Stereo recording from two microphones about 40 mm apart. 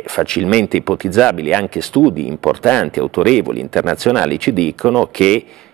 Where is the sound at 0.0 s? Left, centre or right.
Centre.